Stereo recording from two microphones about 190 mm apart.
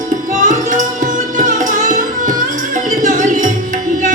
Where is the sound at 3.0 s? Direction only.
40° right (ahead or behind).